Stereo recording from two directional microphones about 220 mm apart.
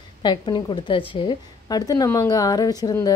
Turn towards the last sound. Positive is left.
turn(degrees=15)  # may be behind; listen again after turning